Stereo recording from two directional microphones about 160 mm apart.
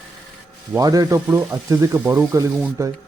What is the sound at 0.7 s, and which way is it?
Speech, 20° right (ahead or behind).